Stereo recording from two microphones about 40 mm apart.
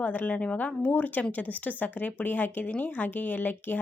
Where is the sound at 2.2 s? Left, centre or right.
Left.